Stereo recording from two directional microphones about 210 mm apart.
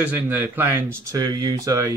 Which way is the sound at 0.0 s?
10° right (ahead or behind).